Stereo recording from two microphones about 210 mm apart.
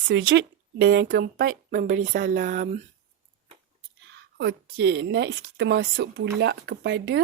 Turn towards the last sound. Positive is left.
turn(degrees=-60)  # may be behind; listen again after turning